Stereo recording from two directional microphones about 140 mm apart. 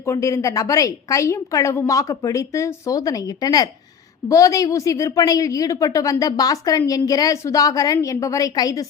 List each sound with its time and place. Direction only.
0.0 s a woman's voice: 20° left (ahead or behind)